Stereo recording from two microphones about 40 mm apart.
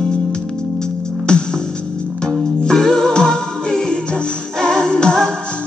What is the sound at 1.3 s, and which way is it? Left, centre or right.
Music, left.